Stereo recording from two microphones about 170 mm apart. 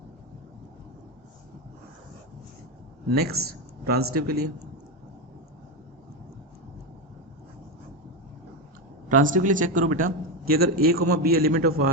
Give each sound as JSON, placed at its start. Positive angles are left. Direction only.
{"t": 3.1, "sound": "speech", "side_deg": -65}
{"t": 9.0, "sound": "a man's voice", "side_deg": -50}